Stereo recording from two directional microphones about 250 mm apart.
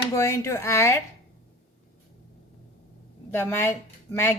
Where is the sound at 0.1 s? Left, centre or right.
Centre.